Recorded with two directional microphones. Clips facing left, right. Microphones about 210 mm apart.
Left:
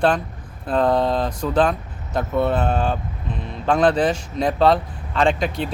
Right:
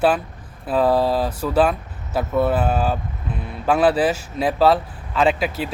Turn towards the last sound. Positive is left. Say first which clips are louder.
# even
turn(degrees=-5)  # may be behind; listen again after turning